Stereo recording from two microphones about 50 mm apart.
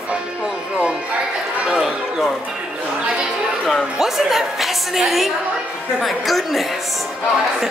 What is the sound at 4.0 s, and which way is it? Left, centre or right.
A woman's voice, centre.